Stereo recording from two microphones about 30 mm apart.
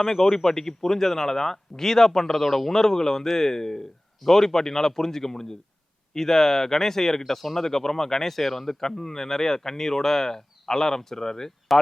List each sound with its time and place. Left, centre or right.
0.0 s a man's voice: centre